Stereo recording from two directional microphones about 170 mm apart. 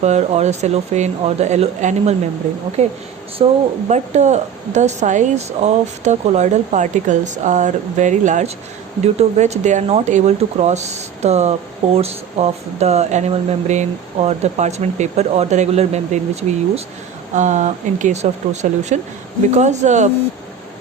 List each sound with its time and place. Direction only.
0.0 s speech: 40° right (ahead or behind)